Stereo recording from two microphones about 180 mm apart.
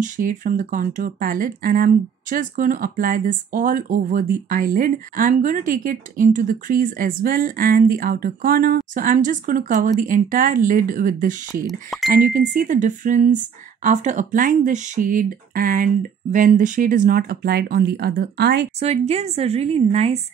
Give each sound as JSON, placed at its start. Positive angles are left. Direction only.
{"t": 0.0, "sound": "speech", "side_deg": -45}
{"t": 18.8, "sound": "a woman's voice", "side_deg": -35}